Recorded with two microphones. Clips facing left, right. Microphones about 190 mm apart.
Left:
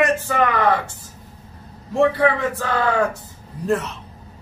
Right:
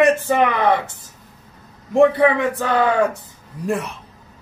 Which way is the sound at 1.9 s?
15° right (ahead or behind).